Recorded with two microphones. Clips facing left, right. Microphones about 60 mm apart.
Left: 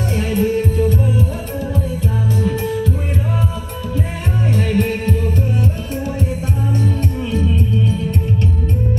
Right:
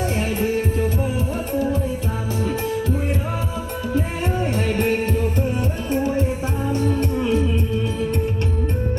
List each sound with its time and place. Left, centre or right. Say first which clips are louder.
0.2 s music: left 7 dB; centre
4.5 s music: left 3 dB; centre